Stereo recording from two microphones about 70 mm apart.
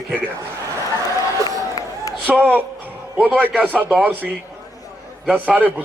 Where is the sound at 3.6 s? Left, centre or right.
Right.